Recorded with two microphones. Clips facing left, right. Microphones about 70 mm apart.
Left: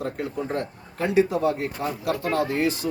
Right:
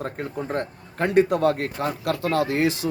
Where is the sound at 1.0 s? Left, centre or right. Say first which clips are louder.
Right 2 dB; right.